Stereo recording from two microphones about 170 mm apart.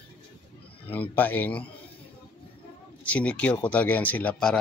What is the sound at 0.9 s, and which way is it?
Speech, 10° left (ahead or behind).